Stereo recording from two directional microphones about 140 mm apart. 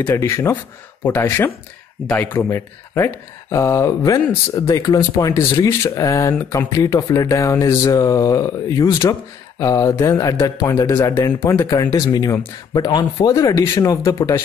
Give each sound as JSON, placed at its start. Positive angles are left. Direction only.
{"t": 0.0, "sound": "speech", "side_deg": 20}